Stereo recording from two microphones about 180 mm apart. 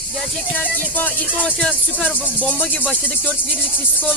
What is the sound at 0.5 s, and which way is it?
Speech, 10° left (ahead or behind).